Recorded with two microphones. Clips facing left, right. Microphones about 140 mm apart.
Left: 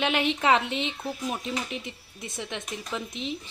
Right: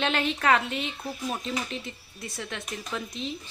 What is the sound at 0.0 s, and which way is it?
A woman's voice, 15° left (ahead or behind).